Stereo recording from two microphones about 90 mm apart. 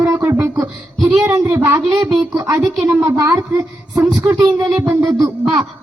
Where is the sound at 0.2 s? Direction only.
20° right (ahead or behind).